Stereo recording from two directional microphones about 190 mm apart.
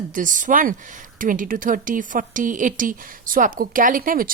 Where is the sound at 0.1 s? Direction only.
45° right (ahead or behind).